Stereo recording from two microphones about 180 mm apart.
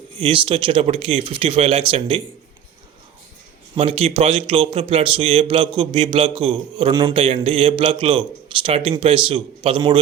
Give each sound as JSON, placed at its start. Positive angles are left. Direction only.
{"t": 0.2, "sound": "speech", "side_deg": -30}
{"t": 3.8, "sound": "a man's voice", "side_deg": -35}